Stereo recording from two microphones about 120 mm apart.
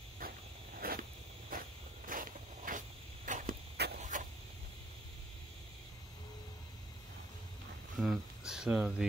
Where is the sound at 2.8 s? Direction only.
90° right.